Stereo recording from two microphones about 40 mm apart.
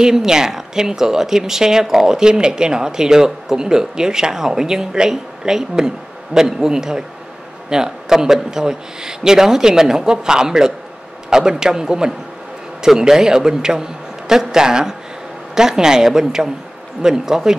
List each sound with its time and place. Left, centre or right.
0.0 s a man's voice: centre